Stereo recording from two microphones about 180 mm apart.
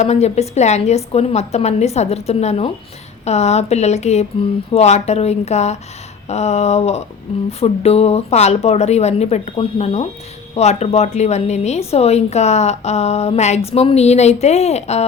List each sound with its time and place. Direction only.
0.0 s a woman's voice: 40° left (ahead or behind)